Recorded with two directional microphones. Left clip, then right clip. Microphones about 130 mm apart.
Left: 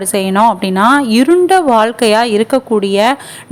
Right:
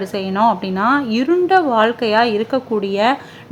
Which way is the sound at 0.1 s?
30° left (ahead or behind).